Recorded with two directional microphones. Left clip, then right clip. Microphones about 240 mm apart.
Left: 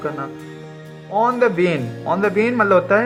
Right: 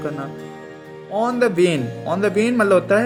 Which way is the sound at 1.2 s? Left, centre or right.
Right.